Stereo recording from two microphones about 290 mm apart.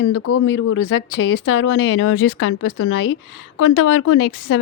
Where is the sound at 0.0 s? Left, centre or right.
Left.